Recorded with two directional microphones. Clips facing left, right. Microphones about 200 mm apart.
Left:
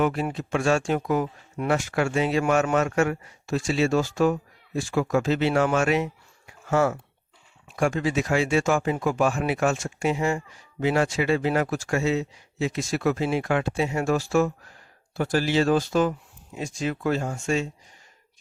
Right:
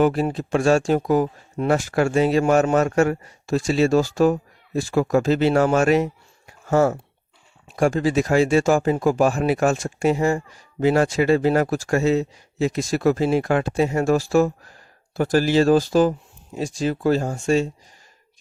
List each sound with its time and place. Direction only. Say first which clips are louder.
0.0 s speech: right 5 dB; 35° right (ahead or behind)